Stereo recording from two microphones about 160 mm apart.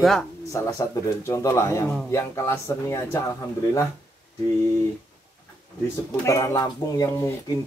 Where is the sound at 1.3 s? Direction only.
20° left (ahead or behind).